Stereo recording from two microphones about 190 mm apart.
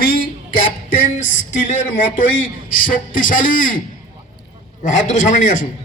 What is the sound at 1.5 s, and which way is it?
A man's voice, 40° left (ahead or behind).